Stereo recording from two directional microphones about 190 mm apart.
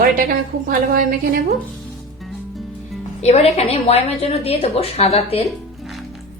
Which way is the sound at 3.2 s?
35° left (ahead or behind).